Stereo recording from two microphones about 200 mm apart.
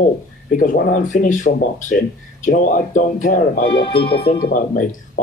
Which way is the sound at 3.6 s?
25° left (ahead or behind).